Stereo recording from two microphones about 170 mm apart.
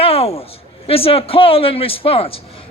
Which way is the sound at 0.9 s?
35° left (ahead or behind).